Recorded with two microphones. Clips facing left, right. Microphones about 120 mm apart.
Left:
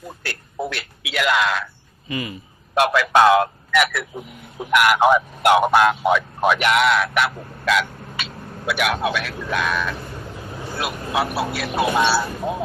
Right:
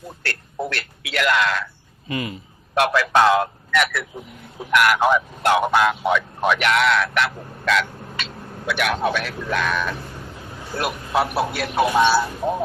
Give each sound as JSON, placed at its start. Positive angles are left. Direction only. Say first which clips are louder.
{"t": 0.2, "sound": "a man's voice", "louder": "even", "side_deg": 10}
{"t": 2.0, "sound": "speech", "louder": "right 1 dB", "side_deg": -50}
{"t": 2.7, "sound": "a man's voice", "louder": "left 1 dB", "side_deg": 15}
{"t": 10.8, "sound": "a man's voice", "louder": "right 2 dB", "side_deg": 0}